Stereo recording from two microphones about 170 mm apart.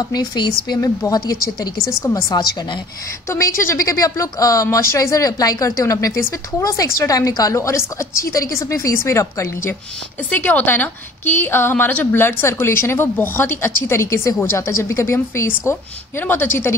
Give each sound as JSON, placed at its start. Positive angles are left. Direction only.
{"t": 0.1, "sound": "a woman's voice", "side_deg": 25}